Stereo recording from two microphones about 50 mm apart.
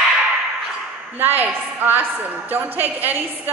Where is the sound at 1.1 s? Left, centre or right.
Right.